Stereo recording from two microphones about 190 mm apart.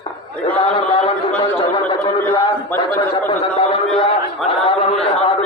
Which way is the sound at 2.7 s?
10° left (ahead or behind).